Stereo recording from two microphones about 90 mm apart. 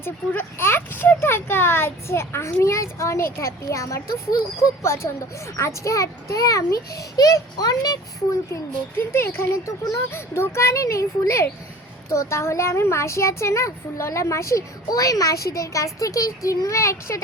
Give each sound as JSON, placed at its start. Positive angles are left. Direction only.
{"t": 0.0, "sound": "speech", "side_deg": 25}
{"t": 9.1, "sound": "speech", "side_deg": 30}